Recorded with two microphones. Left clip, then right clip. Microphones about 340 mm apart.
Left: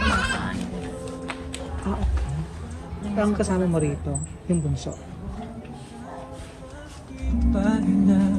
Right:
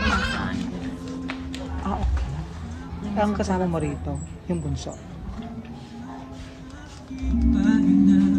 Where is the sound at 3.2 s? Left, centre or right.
Right.